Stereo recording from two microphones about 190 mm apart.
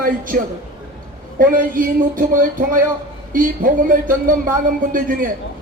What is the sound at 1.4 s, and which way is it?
A man's voice, 45° right (ahead or behind).